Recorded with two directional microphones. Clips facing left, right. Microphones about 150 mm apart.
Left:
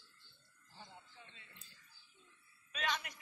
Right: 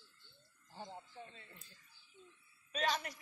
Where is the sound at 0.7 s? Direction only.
40° right (ahead or behind).